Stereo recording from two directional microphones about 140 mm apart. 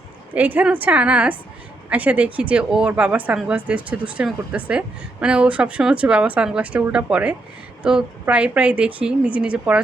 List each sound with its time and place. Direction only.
0.3 s a woman's voice: 10° right (ahead or behind)